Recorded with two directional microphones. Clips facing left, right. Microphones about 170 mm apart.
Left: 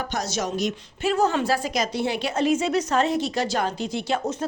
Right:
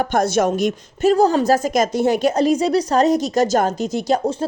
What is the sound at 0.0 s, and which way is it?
A woman's voice, 55° right (ahead or behind).